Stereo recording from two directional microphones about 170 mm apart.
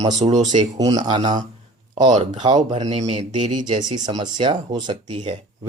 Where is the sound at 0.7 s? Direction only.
20° right (ahead or behind).